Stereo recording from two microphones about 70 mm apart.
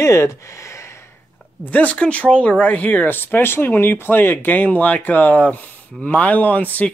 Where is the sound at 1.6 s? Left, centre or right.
Left.